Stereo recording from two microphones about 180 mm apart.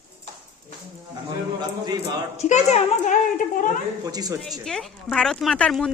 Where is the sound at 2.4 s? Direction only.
40° left (ahead or behind).